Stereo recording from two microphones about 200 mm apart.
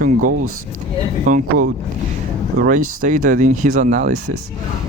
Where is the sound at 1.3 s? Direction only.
40° right (ahead or behind).